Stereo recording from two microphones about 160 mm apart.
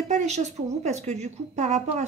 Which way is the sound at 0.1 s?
45° right (ahead or behind).